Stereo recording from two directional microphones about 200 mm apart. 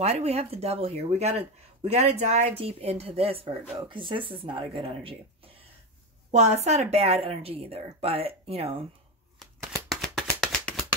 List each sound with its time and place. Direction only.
0.0 s speech: 30° right (ahead or behind)
9.7 s shuffling cards: centre (ahead or behind)